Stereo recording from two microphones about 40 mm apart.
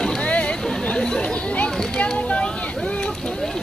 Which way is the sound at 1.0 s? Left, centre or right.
Centre.